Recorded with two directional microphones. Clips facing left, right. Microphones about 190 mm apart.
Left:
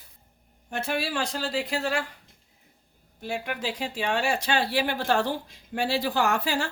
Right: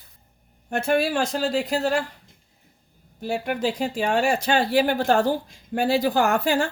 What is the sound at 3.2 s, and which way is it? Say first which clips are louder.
Speech: right 6 dB; 40° right (ahead or behind).